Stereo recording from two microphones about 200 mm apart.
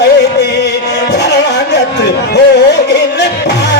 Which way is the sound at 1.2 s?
55° left (ahead or behind).